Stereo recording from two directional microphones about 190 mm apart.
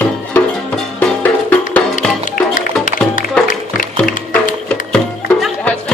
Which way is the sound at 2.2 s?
45° left (ahead or behind).